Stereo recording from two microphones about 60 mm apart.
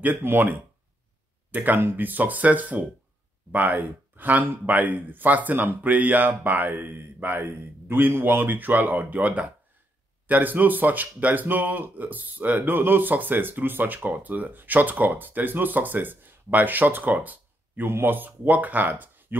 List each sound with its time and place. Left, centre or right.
0.0 s speech: right